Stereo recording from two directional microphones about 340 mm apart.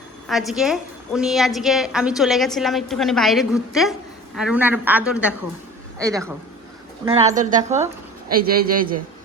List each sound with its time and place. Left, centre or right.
0.3 s a woman's voice: centre; by 9.0 s right